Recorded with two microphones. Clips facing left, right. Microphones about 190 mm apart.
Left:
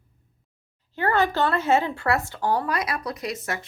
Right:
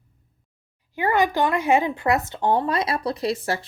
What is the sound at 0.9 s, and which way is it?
Speech, 15° right (ahead or behind).